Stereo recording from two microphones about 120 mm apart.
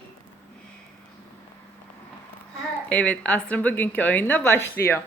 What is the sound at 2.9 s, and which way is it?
A woman's voice, 10° left (ahead or behind).